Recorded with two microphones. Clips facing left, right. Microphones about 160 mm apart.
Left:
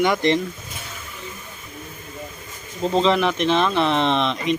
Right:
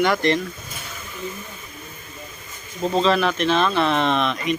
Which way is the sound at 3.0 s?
20° left (ahead or behind).